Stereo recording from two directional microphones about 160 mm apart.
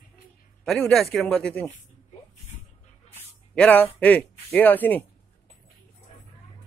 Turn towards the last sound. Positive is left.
turn(degrees=10)  # may be behind; listen again after turning